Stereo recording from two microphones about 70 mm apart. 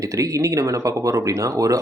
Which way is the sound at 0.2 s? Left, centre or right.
Right.